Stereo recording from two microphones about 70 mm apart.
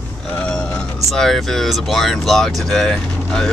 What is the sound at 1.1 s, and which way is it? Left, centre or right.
Speech, centre.